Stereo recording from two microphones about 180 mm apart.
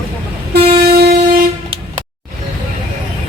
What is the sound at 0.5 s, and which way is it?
Vehicle, 60° right (ahead or behind).